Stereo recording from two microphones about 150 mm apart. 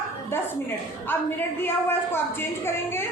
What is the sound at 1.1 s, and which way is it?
A woman's voice, 15° left (ahead or behind).